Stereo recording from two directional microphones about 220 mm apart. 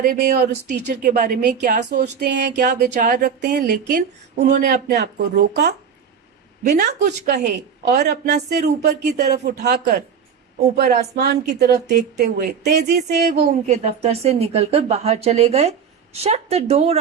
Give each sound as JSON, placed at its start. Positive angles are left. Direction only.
{"t": 0.1, "sound": "a woman's voice", "side_deg": -40}
{"t": 10.8, "sound": "speech", "side_deg": -35}
{"t": 11.3, "sound": "a woman's voice", "side_deg": -50}
{"t": 13.7, "sound": "speech", "side_deg": -30}